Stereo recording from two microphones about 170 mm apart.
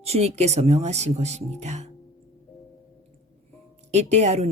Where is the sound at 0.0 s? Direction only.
40° right (ahead or behind).